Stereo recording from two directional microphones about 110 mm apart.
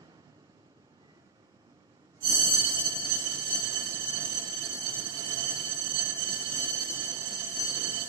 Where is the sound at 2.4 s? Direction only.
35° right (ahead or behind).